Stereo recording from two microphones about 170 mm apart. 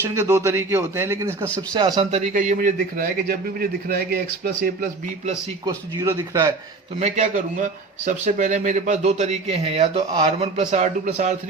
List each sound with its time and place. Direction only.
0.0 s a man's voice: 15° right (ahead or behind)
1.7 s speech: 25° right (ahead or behind)
2.0 s a man's voice: 45° right (ahead or behind); by 4.9 s 60° right (ahead or behind)
5.6 s speech: 20° right (ahead or behind)
7.0 s a man's voice: 45° right (ahead or behind)